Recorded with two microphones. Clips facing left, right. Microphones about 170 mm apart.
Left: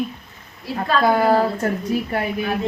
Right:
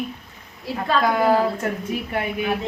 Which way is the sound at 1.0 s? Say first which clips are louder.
Left 2 dB; 35° left (ahead or behind).